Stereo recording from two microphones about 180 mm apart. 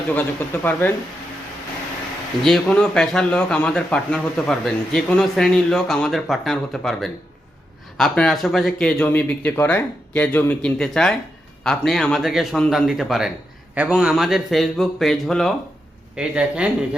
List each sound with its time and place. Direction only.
0.1 s speech: 10° left (ahead or behind)
2.4 s a man's voice: centre (ahead or behind)